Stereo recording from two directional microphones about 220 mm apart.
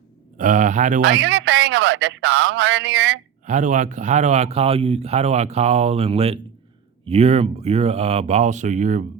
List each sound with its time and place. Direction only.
0.3 s speech: 35° right (ahead or behind)
1.0 s a man's voice: 55° right (ahead or behind)
3.4 s speech: 35° right (ahead or behind)